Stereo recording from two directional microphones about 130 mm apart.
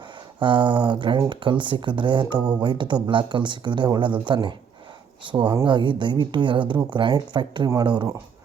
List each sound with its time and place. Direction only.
0.3 s speech: 40° right (ahead or behind)
5.6 s speech: 40° right (ahead or behind)